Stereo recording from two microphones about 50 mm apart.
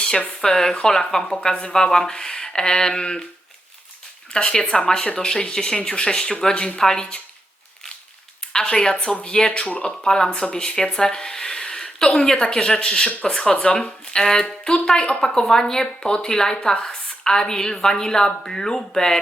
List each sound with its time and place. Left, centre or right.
0.4 s speech: centre
4.3 s speech: centre
8.5 s speech: centre
10.0 s speech: centre
13.1 s speech: left
13.3 s speech: centre